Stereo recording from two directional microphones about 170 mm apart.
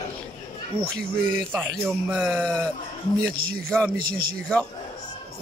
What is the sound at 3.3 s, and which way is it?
Speech, 60° right (ahead or behind).